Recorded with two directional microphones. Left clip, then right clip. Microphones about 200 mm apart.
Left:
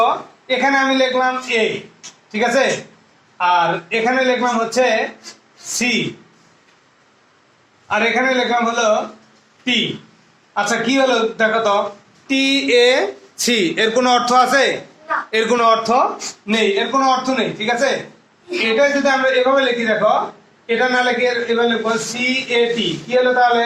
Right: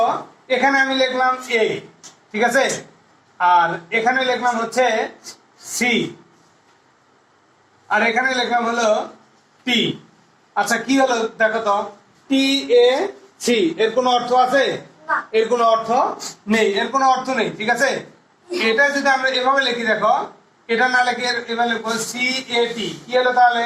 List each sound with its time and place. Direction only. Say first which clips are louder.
0.0 s a man's voice: left 3 dB; 15° left (ahead or behind)
7.9 s a man's voice: left 1 dB; 15° left (ahead or behind)
13.5 s a man's voice: left 1 dB; 50° left (ahead or behind)
16.7 s a man's voice: left 1 dB; 15° left (ahead or behind)